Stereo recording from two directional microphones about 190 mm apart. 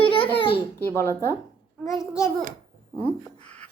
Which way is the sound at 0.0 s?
30° left (ahead or behind).